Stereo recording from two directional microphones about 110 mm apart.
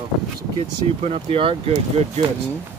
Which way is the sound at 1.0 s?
70° right (ahead or behind).